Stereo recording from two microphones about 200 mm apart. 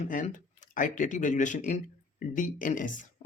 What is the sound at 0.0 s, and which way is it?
Speech, 40° left (ahead or behind).